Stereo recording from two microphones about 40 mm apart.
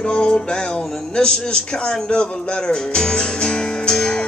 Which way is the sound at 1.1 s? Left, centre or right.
Left.